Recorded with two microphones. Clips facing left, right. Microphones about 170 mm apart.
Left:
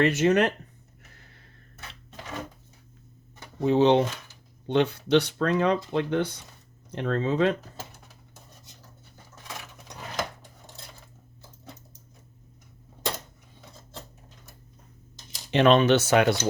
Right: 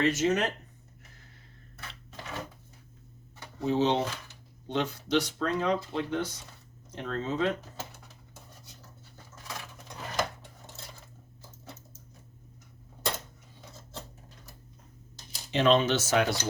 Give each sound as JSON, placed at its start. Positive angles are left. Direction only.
{"t": 0.0, "sound": "speech", "side_deg": 60}
{"t": 3.6, "sound": "speech", "side_deg": 60}
{"t": 15.5, "sound": "speech", "side_deg": 65}